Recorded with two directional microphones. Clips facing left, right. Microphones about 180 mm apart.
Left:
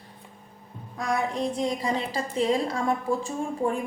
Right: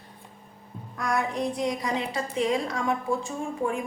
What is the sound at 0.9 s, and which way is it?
A woman's voice, 25° left (ahead or behind).